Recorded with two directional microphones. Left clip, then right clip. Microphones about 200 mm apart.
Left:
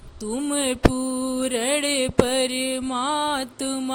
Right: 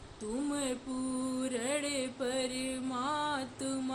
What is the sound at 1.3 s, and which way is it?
Mantra, 45° left (ahead or behind).